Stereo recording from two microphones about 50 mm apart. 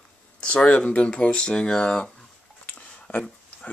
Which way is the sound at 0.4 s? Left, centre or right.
Left.